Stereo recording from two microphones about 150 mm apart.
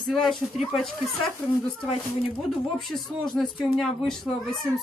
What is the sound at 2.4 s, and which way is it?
Speech, centre (ahead or behind).